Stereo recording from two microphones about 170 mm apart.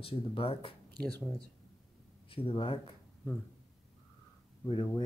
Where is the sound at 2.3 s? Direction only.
30° left (ahead or behind).